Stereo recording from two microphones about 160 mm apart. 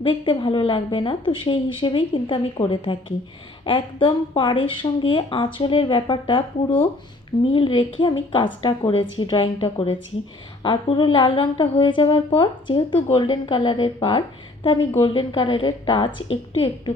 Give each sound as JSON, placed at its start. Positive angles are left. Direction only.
{"t": 0.0, "sound": "a woman's voice", "side_deg": 30}